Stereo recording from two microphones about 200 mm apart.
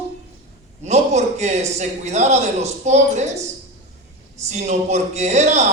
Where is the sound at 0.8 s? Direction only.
35° right (ahead or behind).